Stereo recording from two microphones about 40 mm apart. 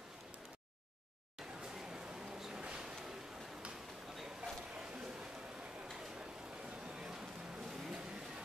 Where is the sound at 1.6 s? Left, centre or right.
Centre.